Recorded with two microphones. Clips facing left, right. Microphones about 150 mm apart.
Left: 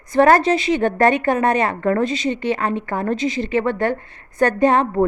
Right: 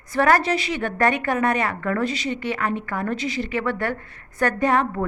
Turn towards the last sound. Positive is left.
turn(degrees=25)  # may be behind; listen again after turning